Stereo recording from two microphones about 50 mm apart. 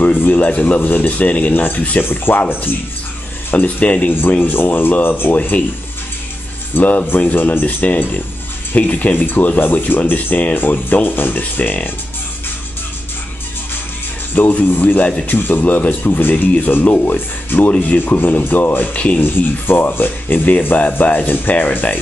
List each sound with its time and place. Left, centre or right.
0.0 s a sound: left
0.5 s speech: left
2.0 s speech: left
3.5 s speech: left
4.1 s speech: left
5.3 s speech: left
6.7 s speech: left
14.3 s speech: left
20.7 s speech: left